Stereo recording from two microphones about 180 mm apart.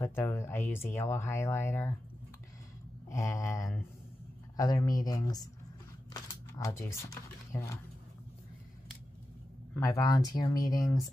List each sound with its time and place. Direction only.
0.0 s speech: 15° left (ahead or behind)
3.1 s speech: 15° left (ahead or behind)
9.8 s speech: 20° left (ahead or behind)